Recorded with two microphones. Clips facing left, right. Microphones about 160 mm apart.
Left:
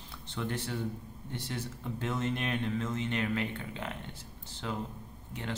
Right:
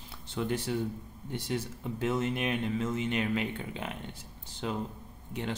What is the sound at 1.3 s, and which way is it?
Speech, 10° right (ahead or behind).